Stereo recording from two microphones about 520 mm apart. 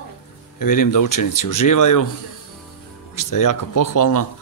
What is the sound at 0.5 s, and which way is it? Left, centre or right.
Speech, left.